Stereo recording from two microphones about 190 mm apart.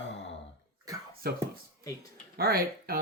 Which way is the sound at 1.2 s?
55° right (ahead or behind).